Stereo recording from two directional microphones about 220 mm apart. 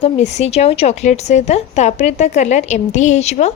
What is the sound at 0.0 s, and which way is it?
A woman's voice, 30° left (ahead or behind).